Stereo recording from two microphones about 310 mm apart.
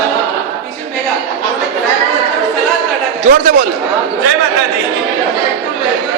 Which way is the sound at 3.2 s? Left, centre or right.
Right.